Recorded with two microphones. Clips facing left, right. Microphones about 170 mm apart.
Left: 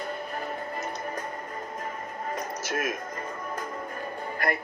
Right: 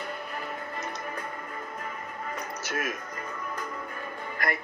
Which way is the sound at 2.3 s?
45° left (ahead or behind).